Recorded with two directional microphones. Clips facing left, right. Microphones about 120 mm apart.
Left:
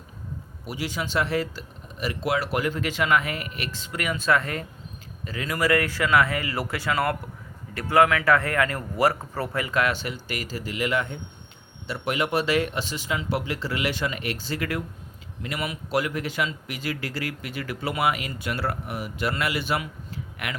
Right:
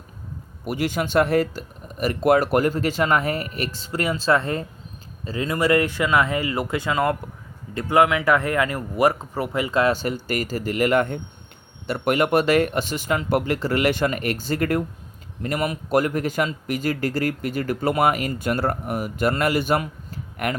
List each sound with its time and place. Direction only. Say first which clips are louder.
0.6 s a man's voice: right 7 dB; 55° right (ahead or behind); by 9.9 s 25° right (ahead or behind)
9.9 s a man's voice: right 7 dB; 45° right (ahead or behind)